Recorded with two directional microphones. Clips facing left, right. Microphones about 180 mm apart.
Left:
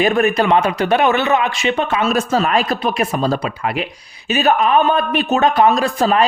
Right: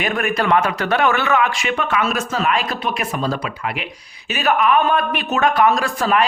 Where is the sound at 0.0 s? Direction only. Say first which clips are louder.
Left 6 dB; 25° left (ahead or behind).